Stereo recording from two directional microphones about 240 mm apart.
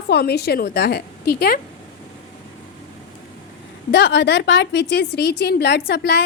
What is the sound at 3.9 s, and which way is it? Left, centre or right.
A woman's voice, left.